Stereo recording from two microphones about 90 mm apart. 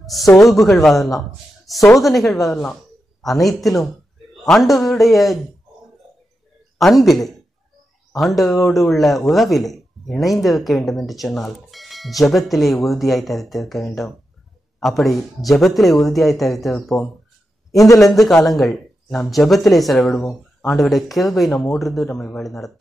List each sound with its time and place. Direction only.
0.0 s a man's voice: centre (ahead or behind)
6.8 s speech: centre (ahead or behind)
17.7 s a man's voice: 40° left (ahead or behind)
18.0 s speech: centre (ahead or behind)